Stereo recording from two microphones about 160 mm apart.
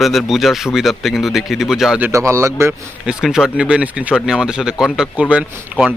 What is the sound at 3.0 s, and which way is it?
Speech, 5° right (ahead or behind).